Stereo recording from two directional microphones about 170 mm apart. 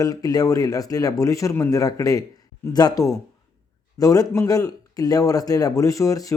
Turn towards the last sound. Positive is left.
turn(degrees=20)  # may be behind; listen again after turning